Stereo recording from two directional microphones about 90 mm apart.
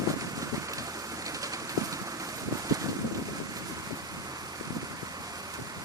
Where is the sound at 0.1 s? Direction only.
40° right (ahead or behind).